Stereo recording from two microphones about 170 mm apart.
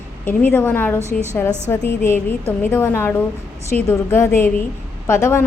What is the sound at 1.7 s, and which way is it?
A woman's voice, 15° left (ahead or behind).